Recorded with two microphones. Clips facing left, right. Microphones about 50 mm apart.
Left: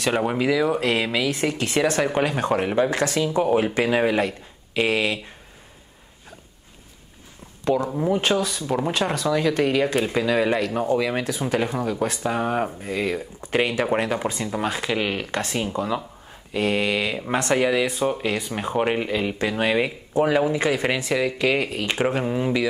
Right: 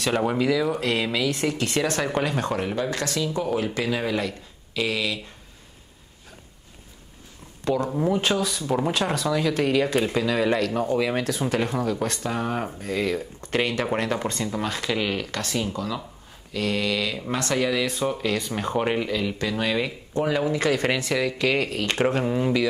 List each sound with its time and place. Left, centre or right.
0.0 s speech: centre
2.5 s speech: left
3.2 s speech: left
7.9 s speech: centre; by 19.9 s left
20.4 s speech: centre